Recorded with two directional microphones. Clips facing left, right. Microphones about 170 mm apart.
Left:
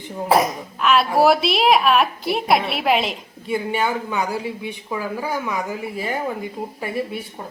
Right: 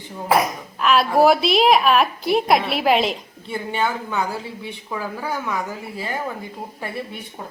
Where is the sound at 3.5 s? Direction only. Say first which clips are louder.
Left 2 dB; 10° left (ahead or behind).